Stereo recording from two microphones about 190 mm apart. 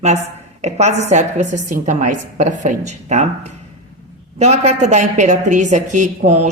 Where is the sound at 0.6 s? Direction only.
35° right (ahead or behind).